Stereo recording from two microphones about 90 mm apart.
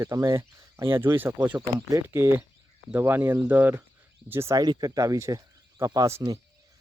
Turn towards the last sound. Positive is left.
turn(degrees=-35)  # may be behind; listen again after turning